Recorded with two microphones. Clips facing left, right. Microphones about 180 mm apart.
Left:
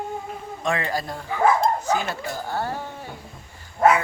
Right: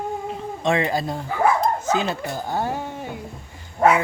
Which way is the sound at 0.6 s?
20° right (ahead or behind).